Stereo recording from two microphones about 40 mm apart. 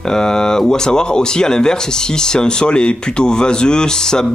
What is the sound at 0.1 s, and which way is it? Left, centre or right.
Speech, centre.